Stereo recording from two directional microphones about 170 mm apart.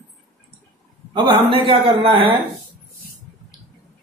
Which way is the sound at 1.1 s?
30° right (ahead or behind).